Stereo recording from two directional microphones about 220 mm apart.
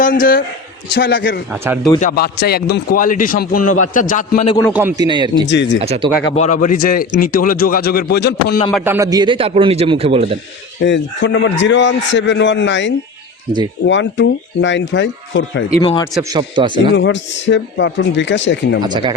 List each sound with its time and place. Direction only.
0.0 s a man's voice: 40° left (ahead or behind)
4.6 s a man's voice: 5° right (ahead or behind)
5.0 s a man's voice: 20° right (ahead or behind)
5.5 s a man's voice: 55° left (ahead or behind)
5.8 s a man's voice: 25° right (ahead or behind)
6.3 s a man's voice: 35° left (ahead or behind)
8.7 s a man's voice: 10° right (ahead or behind); by 10.3 s 25° right (ahead or behind)
10.8 s a man's voice: 55° left (ahead or behind)
15.8 s a man's voice: 20° left (ahead or behind)
16.3 s a man's voice: 20° right (ahead or behind)
16.9 s a man's voice: 55° left (ahead or behind)
18.8 s a man's voice: 20° right (ahead or behind)